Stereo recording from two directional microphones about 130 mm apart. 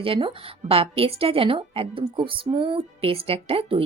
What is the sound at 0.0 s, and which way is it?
A woman's voice, 40° right (ahead or behind).